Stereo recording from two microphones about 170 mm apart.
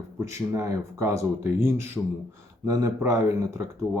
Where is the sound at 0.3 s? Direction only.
15° right (ahead or behind).